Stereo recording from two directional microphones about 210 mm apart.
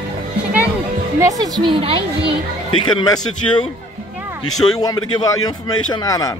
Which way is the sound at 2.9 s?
20° left (ahead or behind).